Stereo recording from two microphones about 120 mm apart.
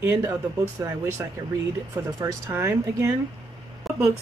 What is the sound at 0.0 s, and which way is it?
Speech, 20° right (ahead or behind).